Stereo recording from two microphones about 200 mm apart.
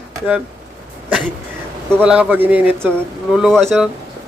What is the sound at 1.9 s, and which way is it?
A man's voice, 5° right (ahead or behind).